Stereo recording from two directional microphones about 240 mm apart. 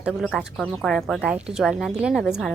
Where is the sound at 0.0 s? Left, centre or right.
Centre.